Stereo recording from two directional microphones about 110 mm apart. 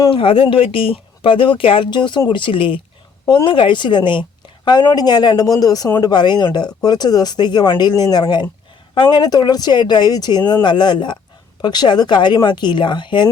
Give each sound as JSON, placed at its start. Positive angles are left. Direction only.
{"t": 0.1, "sound": "a woman's voice", "side_deg": 50}